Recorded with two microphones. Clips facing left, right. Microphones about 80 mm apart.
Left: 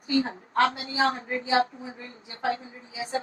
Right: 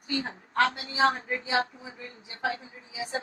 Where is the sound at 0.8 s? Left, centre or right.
Left.